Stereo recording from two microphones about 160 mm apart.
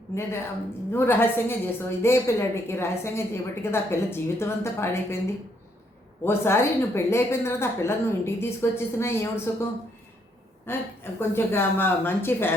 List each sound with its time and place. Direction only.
0.1 s a woman's voice: 15° left (ahead or behind)
6.2 s a woman's voice: 15° left (ahead or behind)
10.7 s a woman's voice: 15° left (ahead or behind)